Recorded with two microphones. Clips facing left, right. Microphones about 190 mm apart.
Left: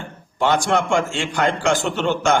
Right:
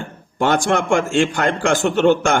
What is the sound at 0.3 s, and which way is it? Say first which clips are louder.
A man's voice: right 1 dB; 50° right (ahead or behind).